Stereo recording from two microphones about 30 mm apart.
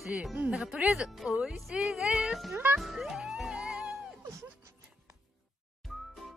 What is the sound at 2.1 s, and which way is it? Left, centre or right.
Speech, right.